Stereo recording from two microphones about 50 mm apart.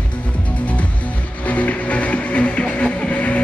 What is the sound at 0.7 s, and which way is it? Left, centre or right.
Music, left.